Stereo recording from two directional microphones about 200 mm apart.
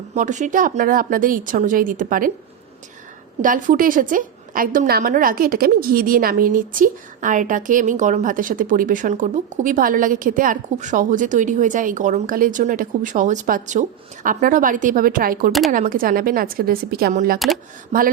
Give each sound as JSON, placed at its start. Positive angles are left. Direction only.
{"t": 0.1, "sound": "a woman's voice", "side_deg": -35}
{"t": 3.4, "sound": "a woman's voice", "side_deg": -40}